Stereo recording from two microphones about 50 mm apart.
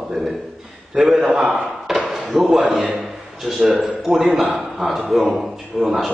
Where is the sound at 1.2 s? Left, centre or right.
Right.